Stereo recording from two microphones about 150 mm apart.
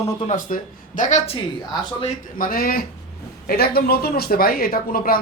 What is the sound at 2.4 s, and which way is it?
Speech, 75° left (ahead or behind).